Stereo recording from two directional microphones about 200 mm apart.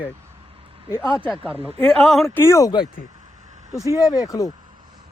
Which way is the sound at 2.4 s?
15° left (ahead or behind).